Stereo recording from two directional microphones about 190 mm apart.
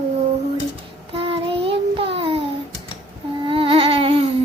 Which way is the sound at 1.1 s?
30° right (ahead or behind).